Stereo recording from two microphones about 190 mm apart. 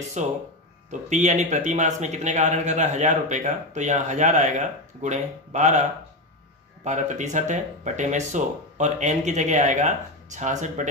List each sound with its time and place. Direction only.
0.2 s a man's voice: 40° right (ahead or behind)